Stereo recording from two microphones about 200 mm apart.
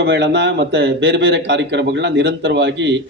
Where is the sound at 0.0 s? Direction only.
60° right (ahead or behind).